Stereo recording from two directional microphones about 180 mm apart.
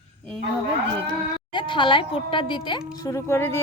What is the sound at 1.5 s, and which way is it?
Speech, 25° left (ahead or behind).